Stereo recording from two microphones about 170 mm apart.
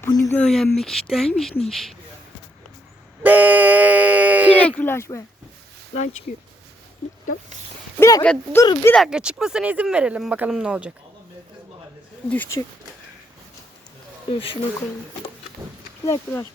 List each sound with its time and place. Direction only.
0.0 s a sound: 20° left (ahead or behind)
0.3 s speech: 5° left (ahead or behind)
3.2 s speech: 10° right (ahead or behind)
4.6 s speech: 10° left (ahead or behind)
7.9 s speech: 15° left (ahead or behind)
8.2 s speech: 5° left (ahead or behind)
8.6 s speech: 25° left (ahead or behind)
8.9 s speech: centre (ahead or behind)
12.3 s speech: 15° left (ahead or behind)
14.3 s speech: 30° left (ahead or behind)
16.0 s speech: 20° left (ahead or behind)